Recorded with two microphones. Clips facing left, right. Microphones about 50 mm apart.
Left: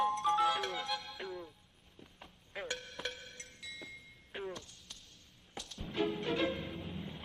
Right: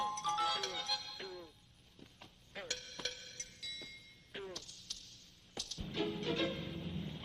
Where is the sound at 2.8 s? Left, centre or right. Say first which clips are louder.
Left 3 dB; centre.